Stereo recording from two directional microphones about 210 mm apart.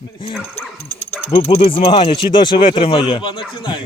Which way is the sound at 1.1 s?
10° left (ahead or behind).